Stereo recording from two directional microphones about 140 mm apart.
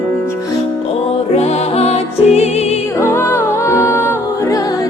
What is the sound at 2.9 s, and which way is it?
Music, 20° left (ahead or behind).